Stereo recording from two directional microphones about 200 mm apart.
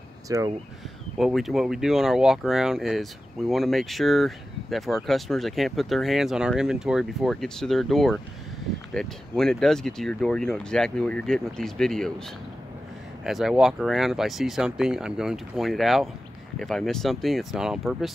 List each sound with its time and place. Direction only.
0.3 s speech: 15° right (ahead or behind)
1.1 s speech: centre (ahead or behind)
13.2 s speech: centre (ahead or behind)